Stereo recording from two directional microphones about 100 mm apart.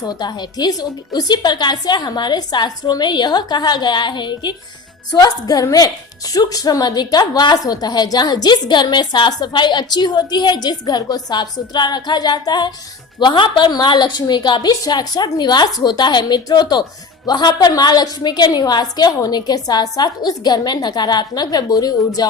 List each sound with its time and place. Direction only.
0.0 s a woman's voice: 45° left (ahead or behind)
5.1 s a woman's voice: 40° left (ahead or behind)